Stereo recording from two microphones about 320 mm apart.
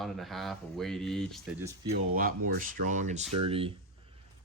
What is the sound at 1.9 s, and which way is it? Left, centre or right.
Speech, right.